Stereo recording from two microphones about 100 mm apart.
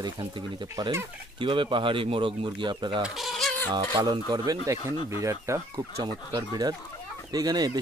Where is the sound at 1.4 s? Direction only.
55° right (ahead or behind).